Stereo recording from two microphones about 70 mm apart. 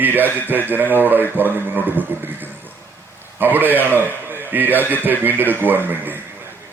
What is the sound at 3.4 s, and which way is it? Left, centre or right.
Mantra, right.